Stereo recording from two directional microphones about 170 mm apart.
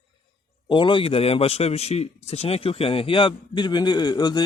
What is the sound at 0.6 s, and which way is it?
A man's voice, 30° left (ahead or behind).